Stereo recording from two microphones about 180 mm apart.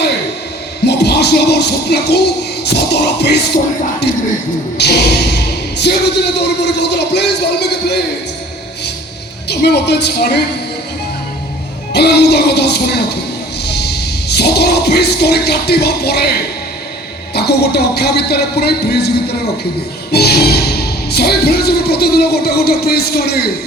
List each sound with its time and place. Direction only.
0.9 s music: 65° left (ahead or behind)
4.8 s speech: 70° left (ahead or behind)
9.5 s speech: 65° left (ahead or behind)
11.9 s speech: 65° left (ahead or behind)
13.7 s music: 65° left (ahead or behind)
17.3 s speech: 65° left (ahead or behind)